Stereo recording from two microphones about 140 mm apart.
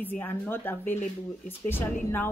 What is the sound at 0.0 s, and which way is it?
Speech, 15° left (ahead or behind).